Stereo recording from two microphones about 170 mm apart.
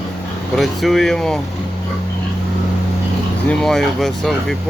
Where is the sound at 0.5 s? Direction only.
Centre (ahead or behind).